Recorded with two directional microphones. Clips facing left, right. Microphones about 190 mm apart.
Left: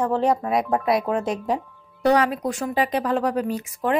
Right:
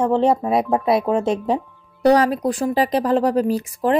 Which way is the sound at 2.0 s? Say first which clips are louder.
Right 4 dB; 35° right (ahead or behind).